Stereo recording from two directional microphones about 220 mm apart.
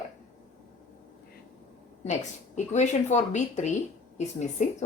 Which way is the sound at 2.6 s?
30° left (ahead or behind).